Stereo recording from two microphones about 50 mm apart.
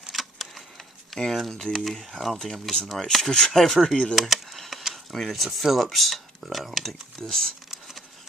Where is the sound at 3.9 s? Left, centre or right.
Centre.